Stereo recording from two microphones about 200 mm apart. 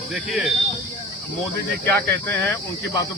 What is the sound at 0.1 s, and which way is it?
Speech, centre (ahead or behind).